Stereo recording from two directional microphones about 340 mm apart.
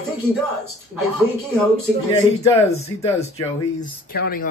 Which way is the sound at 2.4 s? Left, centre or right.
Centre.